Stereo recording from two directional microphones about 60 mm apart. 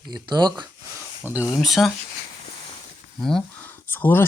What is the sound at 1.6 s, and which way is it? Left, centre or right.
Speech, centre.